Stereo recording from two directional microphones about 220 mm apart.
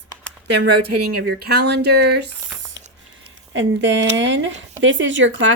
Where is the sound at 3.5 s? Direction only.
55° right (ahead or behind).